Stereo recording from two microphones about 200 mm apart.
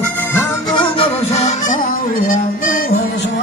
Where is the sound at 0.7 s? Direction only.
30° left (ahead or behind).